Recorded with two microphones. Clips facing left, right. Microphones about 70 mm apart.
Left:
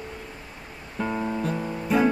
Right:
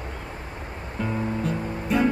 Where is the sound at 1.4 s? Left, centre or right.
Centre.